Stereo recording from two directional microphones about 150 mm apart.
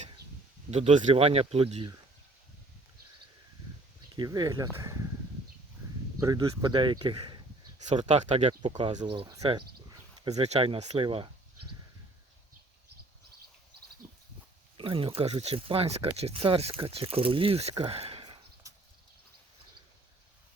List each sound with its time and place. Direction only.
0.7 s speech: 45° right (ahead or behind)
4.1 s speech: 30° right (ahead or behind)
6.1 s speech: 20° right (ahead or behind)
6.6 s speech: 30° right (ahead or behind)
7.9 s speech: 50° right (ahead or behind)
9.0 s speech: 35° right (ahead or behind)
14.8 s speech: 35° right (ahead or behind)
18.6 s horse: 20° right (ahead or behind)